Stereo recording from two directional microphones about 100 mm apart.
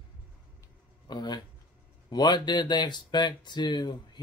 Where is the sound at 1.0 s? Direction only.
45° left (ahead or behind).